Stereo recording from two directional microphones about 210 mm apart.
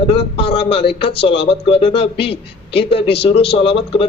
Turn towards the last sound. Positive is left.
turn(degrees=25)  # may be behind; listen again after turning